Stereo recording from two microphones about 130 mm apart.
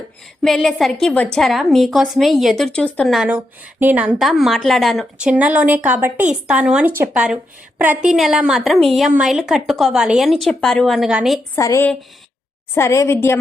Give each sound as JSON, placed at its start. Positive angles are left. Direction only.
{"t": 0.4, "sound": "a woman's voice", "side_deg": 5}
{"t": 3.1, "sound": "a woman's voice", "side_deg": 0}
{"t": 3.3, "sound": "speech", "side_deg": -15}
{"t": 4.2, "sound": "a woman's voice", "side_deg": 0}
{"t": 5.3, "sound": "speech", "side_deg": -10}
{"t": 8.1, "sound": "a woman's voice", "side_deg": -5}
{"t": 11.5, "sound": "a woman's voice", "side_deg": 20}